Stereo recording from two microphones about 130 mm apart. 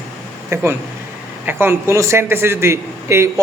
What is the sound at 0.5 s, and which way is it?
A man's voice, 20° right (ahead or behind).